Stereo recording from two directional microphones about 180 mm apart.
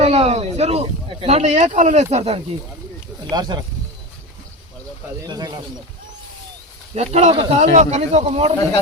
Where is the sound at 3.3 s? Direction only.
25° right (ahead or behind).